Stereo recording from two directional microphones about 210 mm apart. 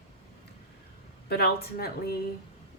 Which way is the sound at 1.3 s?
50° left (ahead or behind).